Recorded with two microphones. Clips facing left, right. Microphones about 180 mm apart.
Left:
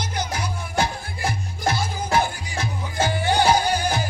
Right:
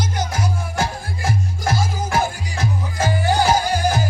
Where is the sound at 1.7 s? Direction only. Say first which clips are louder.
Right 1 dB; 40° right (ahead or behind).